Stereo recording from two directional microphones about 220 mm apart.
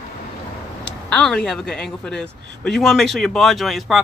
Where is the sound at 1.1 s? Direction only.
5° left (ahead or behind).